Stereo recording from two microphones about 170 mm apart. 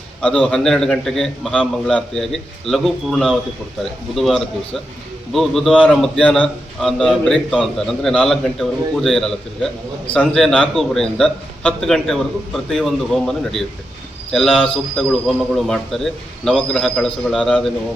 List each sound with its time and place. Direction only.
0.2 s a man's voice: 5° left (ahead or behind)